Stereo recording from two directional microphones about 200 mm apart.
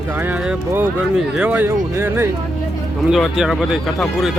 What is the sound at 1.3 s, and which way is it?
Speech, 5° right (ahead or behind).